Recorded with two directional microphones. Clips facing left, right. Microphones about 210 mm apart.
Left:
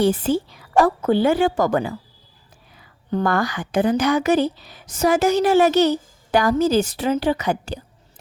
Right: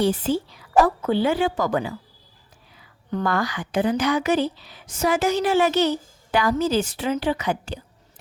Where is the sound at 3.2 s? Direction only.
50° left (ahead or behind).